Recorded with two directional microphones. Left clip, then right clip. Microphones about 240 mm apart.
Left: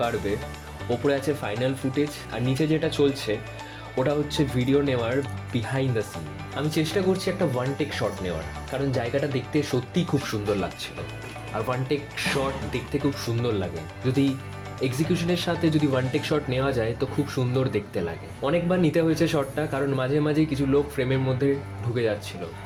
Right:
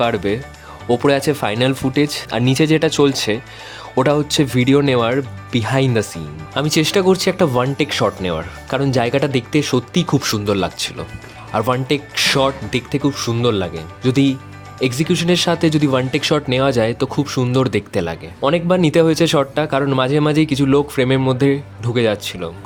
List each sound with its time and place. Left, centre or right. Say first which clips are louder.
0.9 s speech: right 9 dB; right